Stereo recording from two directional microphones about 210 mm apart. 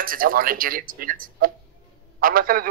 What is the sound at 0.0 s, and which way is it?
Speech, 40° right (ahead or behind).